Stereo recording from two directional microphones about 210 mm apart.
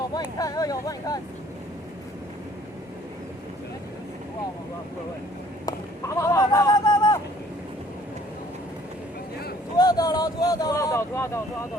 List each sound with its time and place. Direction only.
0.1 s speech: 20° left (ahead or behind)
6.1 s a sound: 15° left (ahead or behind)
9.7 s speech: 20° left (ahead or behind)